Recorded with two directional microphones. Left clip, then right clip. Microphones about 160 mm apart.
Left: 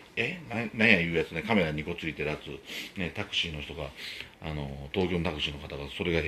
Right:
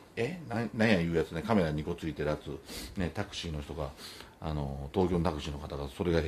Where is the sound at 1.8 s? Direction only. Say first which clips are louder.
Left 1 dB; 25° right (ahead or behind).